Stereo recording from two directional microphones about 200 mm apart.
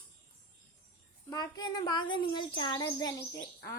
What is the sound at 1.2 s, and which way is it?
A child's voice, 20° left (ahead or behind).